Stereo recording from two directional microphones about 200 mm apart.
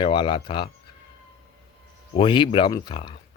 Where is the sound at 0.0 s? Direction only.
25° left (ahead or behind).